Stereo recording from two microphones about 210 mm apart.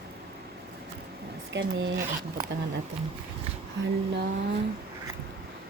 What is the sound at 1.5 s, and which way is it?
Humming, 60° right (ahead or behind).